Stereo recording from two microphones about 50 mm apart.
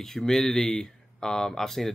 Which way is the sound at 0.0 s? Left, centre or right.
Centre.